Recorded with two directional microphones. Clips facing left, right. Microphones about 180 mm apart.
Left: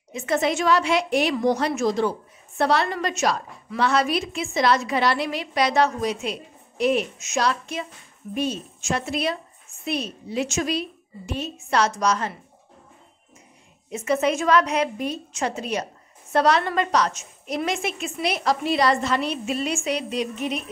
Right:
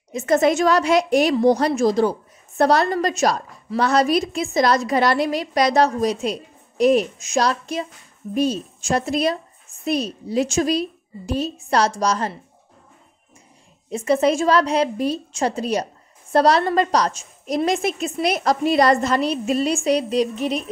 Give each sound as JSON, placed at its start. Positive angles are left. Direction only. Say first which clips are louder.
{"t": 0.1, "sound": "a woman's voice", "louder": "right 6 dB", "side_deg": -40}
{"t": 13.8, "sound": "a woman's voice", "louder": "right 4 dB", "side_deg": -35}